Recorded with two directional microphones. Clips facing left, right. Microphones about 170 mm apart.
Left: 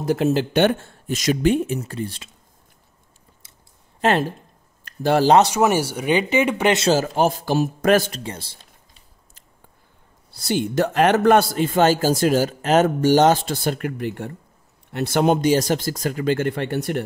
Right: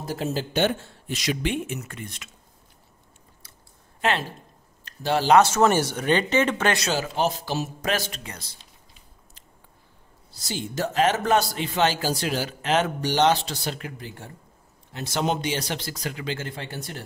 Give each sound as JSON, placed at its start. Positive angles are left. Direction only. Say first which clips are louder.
{"t": 0.0, "sound": "a man's voice", "louder": "left 9 dB", "side_deg": 70}
{"t": 4.0, "sound": "speech", "louder": "left 6 dB", "side_deg": 45}
{"t": 5.4, "sound": "speech", "louder": "left 2 dB", "side_deg": 15}
{"t": 6.9, "sound": "a man's voice", "louder": "left 7 dB", "side_deg": 45}
{"t": 8.2, "sound": "speech", "louder": "left 8 dB", "side_deg": 30}
{"t": 10.3, "sound": "a man's voice", "louder": "left 9 dB", "side_deg": 60}